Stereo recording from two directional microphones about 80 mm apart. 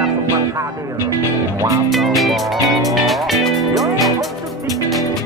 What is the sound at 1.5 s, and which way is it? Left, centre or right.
Music, right.